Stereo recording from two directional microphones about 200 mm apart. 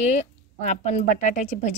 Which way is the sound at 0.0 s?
35° left (ahead or behind).